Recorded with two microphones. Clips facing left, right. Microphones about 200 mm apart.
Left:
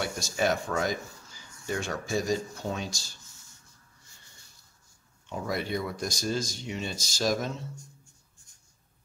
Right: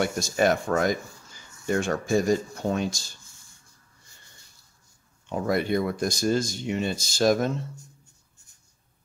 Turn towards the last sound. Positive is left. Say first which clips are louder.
# right 7 dB
turn(degrees=-55)  # may be behind; listen again after turning